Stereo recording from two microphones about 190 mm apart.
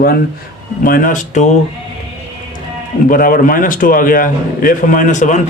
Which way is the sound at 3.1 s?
50° left (ahead or behind).